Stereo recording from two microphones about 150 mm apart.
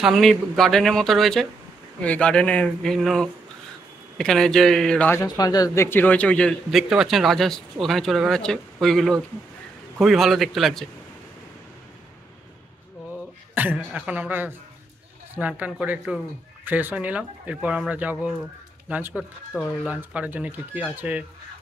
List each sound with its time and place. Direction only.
0.0 s a man's voice: centre (ahead or behind)
5.2 s speech: 25° left (ahead or behind)
5.9 s a man's voice: 10° left (ahead or behind)
13.6 s speech: 10° right (ahead or behind)